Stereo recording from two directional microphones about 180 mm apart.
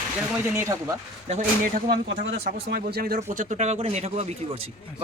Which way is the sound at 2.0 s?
65° right (ahead or behind).